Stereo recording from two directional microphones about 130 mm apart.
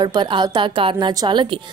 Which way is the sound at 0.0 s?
35° right (ahead or behind).